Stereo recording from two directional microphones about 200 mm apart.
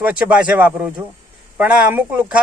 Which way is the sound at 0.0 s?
5° right (ahead or behind).